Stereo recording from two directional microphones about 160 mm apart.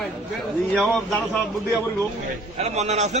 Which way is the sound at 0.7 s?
5° left (ahead or behind).